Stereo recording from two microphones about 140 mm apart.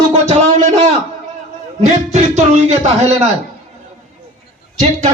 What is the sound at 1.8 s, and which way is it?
A man's voice, 55° right (ahead or behind).